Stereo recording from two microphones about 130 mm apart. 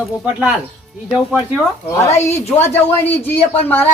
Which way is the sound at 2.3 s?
20° left (ahead or behind).